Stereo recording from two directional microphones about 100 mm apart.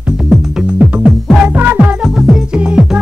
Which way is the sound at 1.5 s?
20° right (ahead or behind).